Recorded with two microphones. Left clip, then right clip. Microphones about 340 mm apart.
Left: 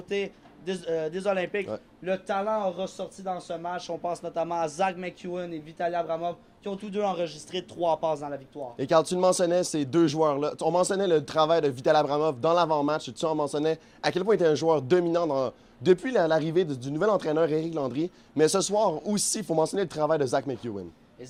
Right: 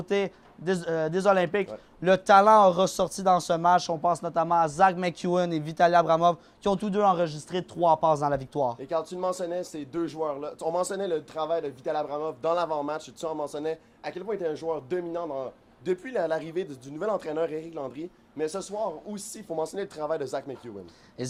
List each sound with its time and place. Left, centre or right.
0.1 s speech: right
2.0 s speech: right
6.8 s speech: centre
8.8 s a man's voice: left
14.0 s a man's voice: left